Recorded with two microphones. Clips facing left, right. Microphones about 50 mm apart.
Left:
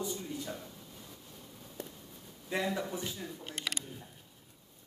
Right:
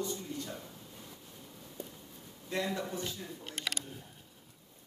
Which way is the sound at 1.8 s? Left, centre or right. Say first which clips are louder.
Left 1 dB; left.